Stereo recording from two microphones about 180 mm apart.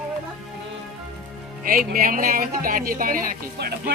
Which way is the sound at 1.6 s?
50° right (ahead or behind).